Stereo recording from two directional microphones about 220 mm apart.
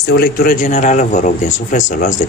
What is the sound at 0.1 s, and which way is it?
A man's voice, 45° left (ahead or behind).